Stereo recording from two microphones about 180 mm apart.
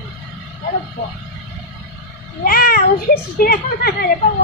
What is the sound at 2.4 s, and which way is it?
Speech, 55° left (ahead or behind).